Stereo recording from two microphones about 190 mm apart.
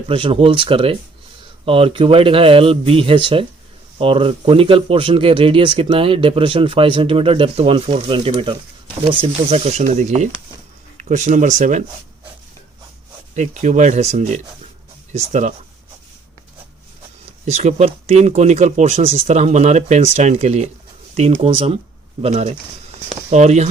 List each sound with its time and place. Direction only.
0.1 s speech: 30° right (ahead or behind)
13.3 s speech: 40° right (ahead or behind)
17.4 s speech: 35° right (ahead or behind)